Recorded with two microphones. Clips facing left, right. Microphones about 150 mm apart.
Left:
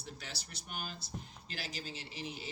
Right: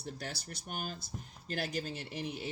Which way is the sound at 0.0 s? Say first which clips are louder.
Right 6 dB; 50° right (ahead or behind).